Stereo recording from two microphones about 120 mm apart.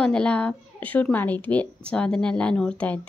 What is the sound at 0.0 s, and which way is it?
A woman's voice, 10° left (ahead or behind).